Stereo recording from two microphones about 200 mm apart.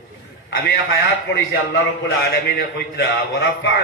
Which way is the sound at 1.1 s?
55° left (ahead or behind).